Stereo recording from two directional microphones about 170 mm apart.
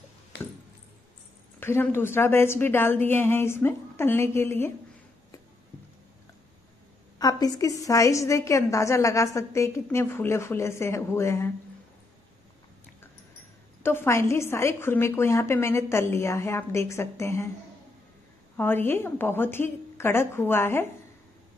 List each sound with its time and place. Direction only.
0.3 s a sound: 90° left
1.6 s a woman's voice: 15° left (ahead or behind)
7.2 s a woman's voice: 20° left (ahead or behind)
13.8 s a woman's voice: 15° left (ahead or behind)
18.6 s a woman's voice: 10° left (ahead or behind)